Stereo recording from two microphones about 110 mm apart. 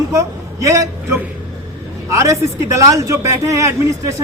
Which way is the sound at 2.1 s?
25° right (ahead or behind).